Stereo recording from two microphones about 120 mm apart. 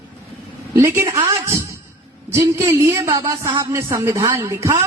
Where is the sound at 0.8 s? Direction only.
20° right (ahead or behind).